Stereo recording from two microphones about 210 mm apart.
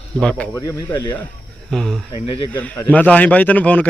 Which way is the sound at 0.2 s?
5° left (ahead or behind).